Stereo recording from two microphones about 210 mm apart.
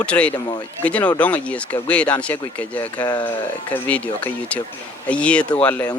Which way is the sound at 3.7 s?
5° left (ahead or behind).